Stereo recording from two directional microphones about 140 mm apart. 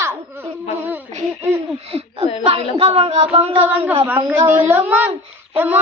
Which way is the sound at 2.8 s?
45° right (ahead or behind).